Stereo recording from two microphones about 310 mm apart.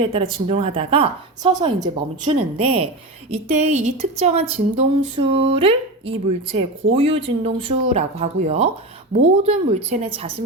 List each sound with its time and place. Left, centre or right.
0.0 s a woman's voice: centre